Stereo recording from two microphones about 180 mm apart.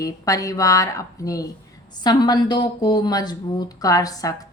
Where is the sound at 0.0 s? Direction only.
20° left (ahead or behind).